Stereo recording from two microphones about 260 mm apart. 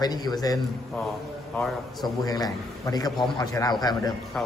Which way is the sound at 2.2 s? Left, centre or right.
Centre.